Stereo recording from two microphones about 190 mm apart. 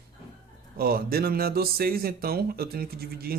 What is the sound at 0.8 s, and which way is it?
Speech, 50° right (ahead or behind).